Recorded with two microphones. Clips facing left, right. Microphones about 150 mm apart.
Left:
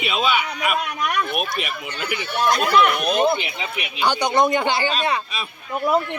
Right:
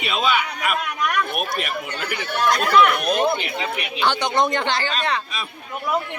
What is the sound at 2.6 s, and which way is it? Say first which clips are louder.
A man's voice: right 2 dB; 5° left (ahead or behind).